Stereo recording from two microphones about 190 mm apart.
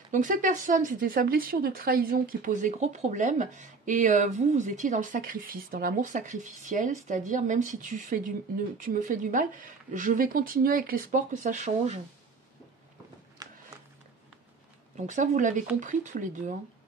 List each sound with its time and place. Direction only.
0.1 s speech: 45° right (ahead or behind)
13.4 s a sound: 20° right (ahead or behind)
15.0 s speech: 40° right (ahead or behind)